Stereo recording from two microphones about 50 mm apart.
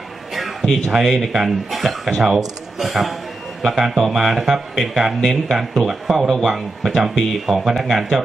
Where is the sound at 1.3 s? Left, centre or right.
Centre.